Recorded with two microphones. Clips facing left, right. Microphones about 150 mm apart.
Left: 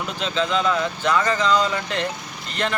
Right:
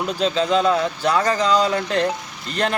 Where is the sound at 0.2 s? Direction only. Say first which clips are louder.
Right 4 dB; 35° right (ahead or behind).